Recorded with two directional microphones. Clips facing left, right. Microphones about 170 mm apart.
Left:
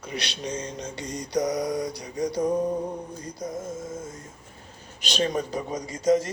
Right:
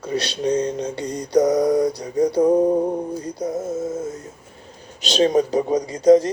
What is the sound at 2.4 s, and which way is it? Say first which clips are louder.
Music: right 8 dB; 60° right (ahead or behind).